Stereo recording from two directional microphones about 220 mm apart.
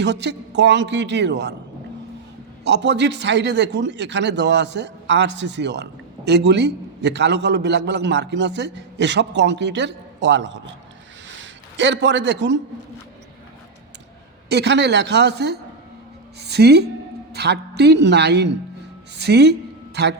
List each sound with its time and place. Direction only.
0.0 s speech: 50° right (ahead or behind)
2.6 s speech: 50° right (ahead or behind)
11.8 s speech: 55° right (ahead or behind)
14.5 s a woman's voice: 50° right (ahead or behind)